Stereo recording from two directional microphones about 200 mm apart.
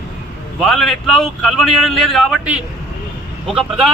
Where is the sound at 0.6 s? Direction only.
Centre (ahead or behind).